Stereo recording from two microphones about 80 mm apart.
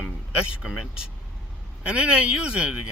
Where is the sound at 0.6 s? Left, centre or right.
Centre.